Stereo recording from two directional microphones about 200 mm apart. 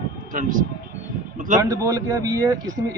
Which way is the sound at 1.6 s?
15° right (ahead or behind).